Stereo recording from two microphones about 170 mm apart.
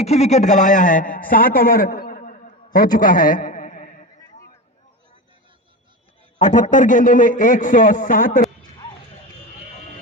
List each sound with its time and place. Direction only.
0.0 s a man's voice: 40° left (ahead or behind)
6.4 s a man's voice: 45° left (ahead or behind)